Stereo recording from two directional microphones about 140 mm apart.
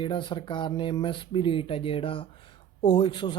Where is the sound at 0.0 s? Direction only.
35° left (ahead or behind).